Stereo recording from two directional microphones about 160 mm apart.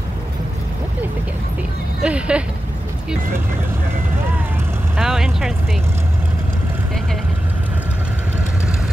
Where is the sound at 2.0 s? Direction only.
5° right (ahead or behind).